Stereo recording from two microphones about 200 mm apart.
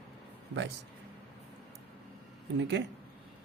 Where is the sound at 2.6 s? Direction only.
65° right (ahead or behind).